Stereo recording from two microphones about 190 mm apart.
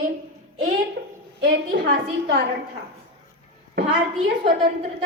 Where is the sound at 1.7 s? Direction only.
50° right (ahead or behind).